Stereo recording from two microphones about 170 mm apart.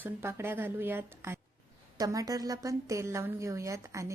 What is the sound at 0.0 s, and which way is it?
A woman's voice, 15° right (ahead or behind).